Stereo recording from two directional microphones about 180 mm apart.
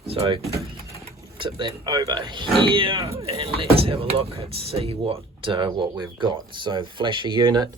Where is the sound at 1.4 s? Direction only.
25° right (ahead or behind).